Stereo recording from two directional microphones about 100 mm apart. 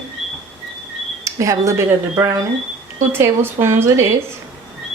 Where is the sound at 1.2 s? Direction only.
30° right (ahead or behind).